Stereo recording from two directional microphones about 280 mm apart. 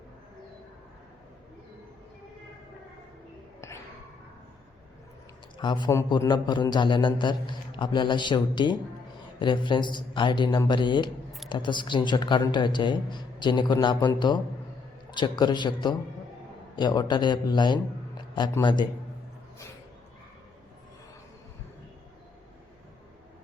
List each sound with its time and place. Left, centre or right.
5.5 s a man's voice: centre